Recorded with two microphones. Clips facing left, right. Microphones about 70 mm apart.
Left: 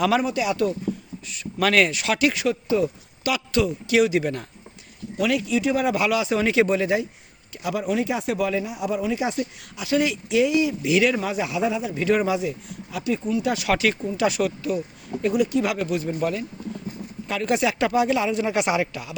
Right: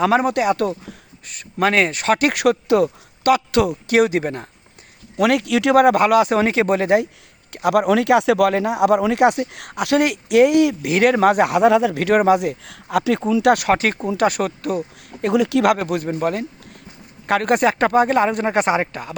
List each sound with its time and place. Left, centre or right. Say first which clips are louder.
0.0 s speech: right 4 dB; right
0.3 s speech: right 5 dB; right
1.6 s speech: right 2 dB; right
1.9 s speech: right 4 dB; right
3.3 s speech: right 5 dB; right
5.1 s speech: right 5 dB; right
5.8 s speech: right 8 dB; right
10.8 s speech: right 6 dB; right
13.7 s speech: right 4 dB; right
15.7 s speech: right 5 dB; right
17.2 s speech: right 6 dB; right